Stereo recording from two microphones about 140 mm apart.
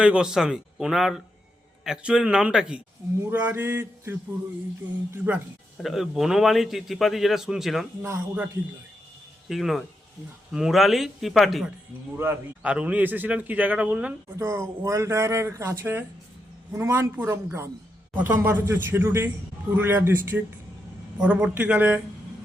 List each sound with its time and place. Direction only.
0.0 s a man's voice: 5° right (ahead or behind)
5.7 s a man's voice: centre (ahead or behind)
8.0 s speech: 20° right (ahead or behind)
9.5 s a man's voice: centre (ahead or behind)
12.2 s a man's voice: 10° right (ahead or behind)